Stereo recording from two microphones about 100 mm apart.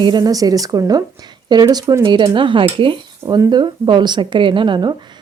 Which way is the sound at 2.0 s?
50° right (ahead or behind).